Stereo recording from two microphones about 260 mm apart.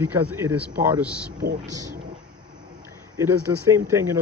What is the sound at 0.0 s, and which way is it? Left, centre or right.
Speech, centre.